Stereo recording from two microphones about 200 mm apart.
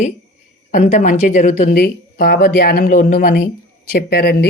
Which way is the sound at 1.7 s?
50° left (ahead or behind).